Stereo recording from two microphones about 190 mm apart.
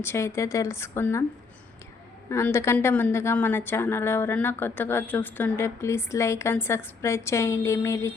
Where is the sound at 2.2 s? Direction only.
15° left (ahead or behind).